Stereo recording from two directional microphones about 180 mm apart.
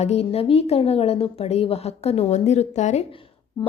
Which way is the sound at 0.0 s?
35° left (ahead or behind).